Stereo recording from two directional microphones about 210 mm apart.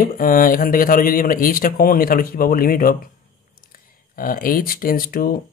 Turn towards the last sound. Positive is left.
turn(degrees=45)  # may be behind; listen again after turning